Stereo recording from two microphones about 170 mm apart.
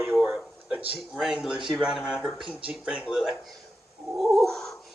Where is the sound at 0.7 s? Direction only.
10° right (ahead or behind).